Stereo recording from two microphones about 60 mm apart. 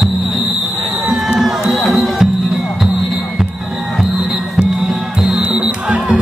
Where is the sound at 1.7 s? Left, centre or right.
Centre.